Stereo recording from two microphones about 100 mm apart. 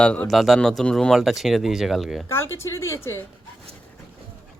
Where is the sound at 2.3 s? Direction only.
25° left (ahead or behind).